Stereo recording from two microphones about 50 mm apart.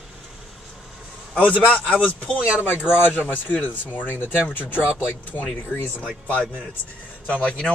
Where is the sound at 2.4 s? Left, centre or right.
Right.